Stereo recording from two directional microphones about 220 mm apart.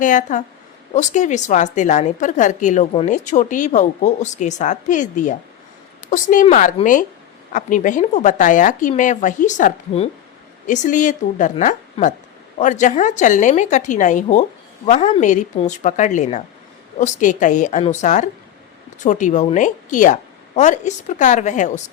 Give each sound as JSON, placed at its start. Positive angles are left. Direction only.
{"t": 0.0, "sound": "a woman's voice", "side_deg": 35}